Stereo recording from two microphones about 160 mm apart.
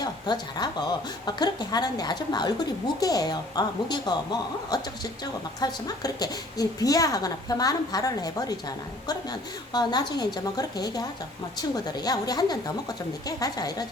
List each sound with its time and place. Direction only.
0.0 s a woman's voice: 25° left (ahead or behind)
9.7 s a woman's voice: 25° left (ahead or behind)